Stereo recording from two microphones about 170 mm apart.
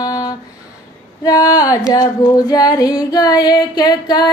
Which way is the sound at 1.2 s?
20° left (ahead or behind).